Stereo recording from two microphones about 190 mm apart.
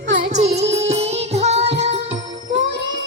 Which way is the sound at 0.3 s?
40° right (ahead or behind).